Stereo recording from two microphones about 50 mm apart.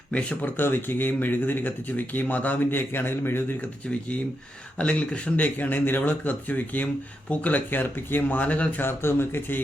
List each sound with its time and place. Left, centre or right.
0.1 s speech: left
0.4 s speech: left
2.6 s a man's voice: left
4.8 s speech: left
5.5 s speech: left
8.8 s a man's voice: left